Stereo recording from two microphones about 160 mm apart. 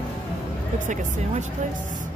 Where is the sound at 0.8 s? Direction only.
50° right (ahead or behind).